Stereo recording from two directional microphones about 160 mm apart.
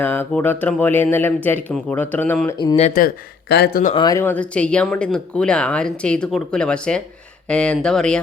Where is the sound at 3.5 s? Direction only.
75° left (ahead or behind).